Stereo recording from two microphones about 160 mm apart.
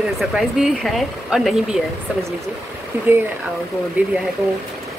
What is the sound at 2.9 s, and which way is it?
Speech, 15° right (ahead or behind).